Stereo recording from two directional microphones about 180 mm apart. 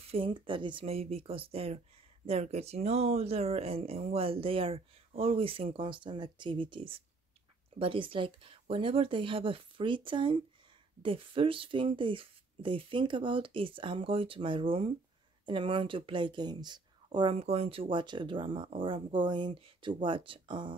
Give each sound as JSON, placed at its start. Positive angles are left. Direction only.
{"t": 0.1, "sound": "speech", "side_deg": -30}